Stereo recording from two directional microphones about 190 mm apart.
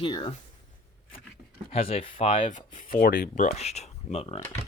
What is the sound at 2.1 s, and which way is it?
Speech, 40° left (ahead or behind).